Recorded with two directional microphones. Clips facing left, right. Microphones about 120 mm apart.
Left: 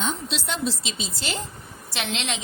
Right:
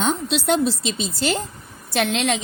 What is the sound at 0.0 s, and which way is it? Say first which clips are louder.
A woman's voice: right 7 dB; 60° right (ahead or behind).